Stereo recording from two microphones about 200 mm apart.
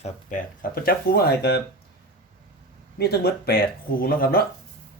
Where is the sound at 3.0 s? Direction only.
55° left (ahead or behind).